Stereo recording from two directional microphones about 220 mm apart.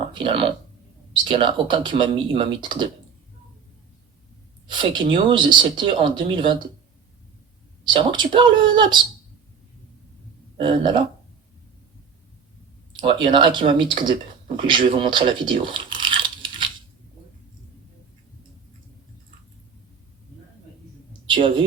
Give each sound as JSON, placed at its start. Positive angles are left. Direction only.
{"t": 0.1, "sound": "speech", "side_deg": -25}
{"t": 4.7, "sound": "speech", "side_deg": -20}
{"t": 7.9, "sound": "speech", "side_deg": -20}
{"t": 10.6, "sound": "speech", "side_deg": -20}
{"t": 13.0, "sound": "speech", "side_deg": -20}
{"t": 14.9, "sound": "a sound", "side_deg": -20}
{"t": 21.1, "sound": "a sound", "side_deg": -20}